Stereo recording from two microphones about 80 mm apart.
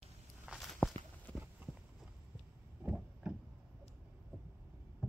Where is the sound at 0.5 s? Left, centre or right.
Centre.